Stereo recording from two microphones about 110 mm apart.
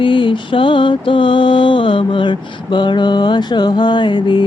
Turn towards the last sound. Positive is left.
turn(degrees=45)  # may be behind; listen again after turning